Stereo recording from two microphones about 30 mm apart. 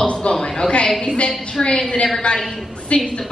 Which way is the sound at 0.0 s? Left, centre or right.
Left.